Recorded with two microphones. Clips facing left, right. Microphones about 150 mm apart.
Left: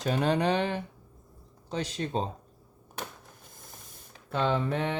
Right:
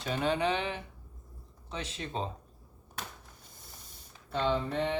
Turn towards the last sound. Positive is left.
turn(degrees=60)  # may be behind; listen again after turning